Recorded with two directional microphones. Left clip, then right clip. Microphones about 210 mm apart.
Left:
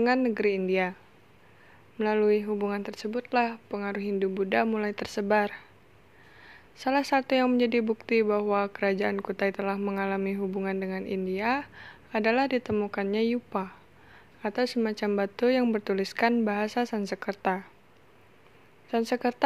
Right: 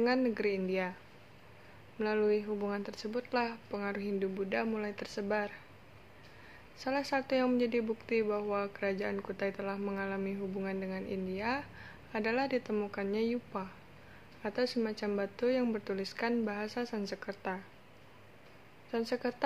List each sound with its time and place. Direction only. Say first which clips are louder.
0.0 s a woman's voice: left 6 dB; 35° left (ahead or behind)
2.0 s a woman's voice: left 6 dB; 35° left (ahead or behind)
18.9 s a woman's voice: left 7 dB; 40° left (ahead or behind)